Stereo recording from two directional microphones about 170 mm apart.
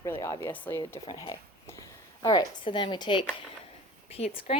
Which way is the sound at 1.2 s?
20° left (ahead or behind).